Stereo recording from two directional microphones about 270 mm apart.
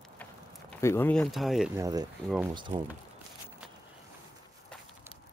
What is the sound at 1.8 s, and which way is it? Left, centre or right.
Speech, centre.